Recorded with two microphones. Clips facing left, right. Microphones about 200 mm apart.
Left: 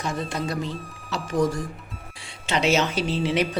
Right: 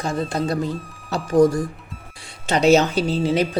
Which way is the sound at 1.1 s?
35° right (ahead or behind).